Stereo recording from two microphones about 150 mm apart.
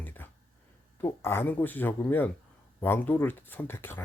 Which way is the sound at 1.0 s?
15° left (ahead or behind).